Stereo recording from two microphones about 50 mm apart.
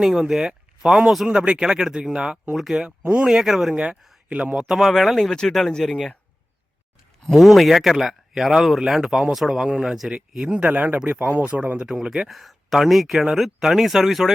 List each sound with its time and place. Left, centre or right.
0.0 s speech: centre
3.0 s speech: right
3.2 s speech: centre
4.8 s speech: centre
7.3 s speech: centre; by 11.9 s right
11.9 s speech: centre
12.3 s speech: centre